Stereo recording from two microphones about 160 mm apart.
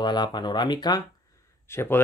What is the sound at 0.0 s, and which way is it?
Speech, 25° left (ahead or behind).